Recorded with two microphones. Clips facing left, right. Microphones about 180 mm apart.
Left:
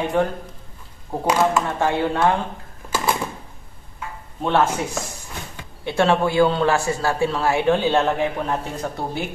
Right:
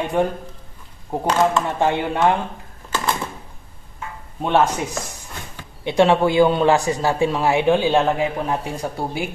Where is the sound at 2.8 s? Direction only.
10° left (ahead or behind).